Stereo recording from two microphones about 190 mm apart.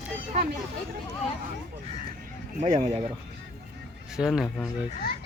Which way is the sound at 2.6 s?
35° right (ahead or behind).